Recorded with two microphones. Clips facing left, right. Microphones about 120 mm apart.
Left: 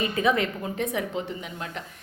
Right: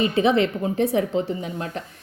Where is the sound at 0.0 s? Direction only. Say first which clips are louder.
Right 5 dB; 30° right (ahead or behind).